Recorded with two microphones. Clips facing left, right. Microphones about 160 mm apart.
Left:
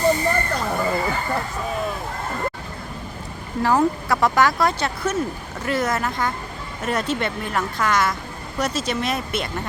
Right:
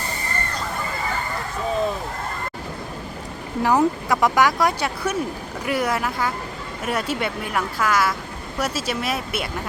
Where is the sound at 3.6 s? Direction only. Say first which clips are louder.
Even; 15° right (ahead or behind).